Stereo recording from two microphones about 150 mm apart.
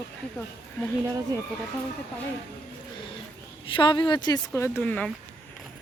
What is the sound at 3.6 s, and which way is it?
Speech, 30° left (ahead or behind).